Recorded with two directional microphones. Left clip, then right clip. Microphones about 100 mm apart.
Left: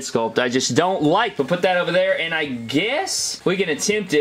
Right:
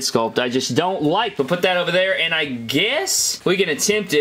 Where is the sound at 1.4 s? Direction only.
35° right (ahead or behind).